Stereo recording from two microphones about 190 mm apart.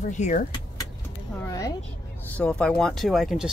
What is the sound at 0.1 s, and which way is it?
Speech, 40° left (ahead or behind).